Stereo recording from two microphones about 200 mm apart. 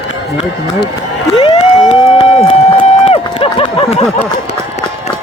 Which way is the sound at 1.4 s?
30° left (ahead or behind).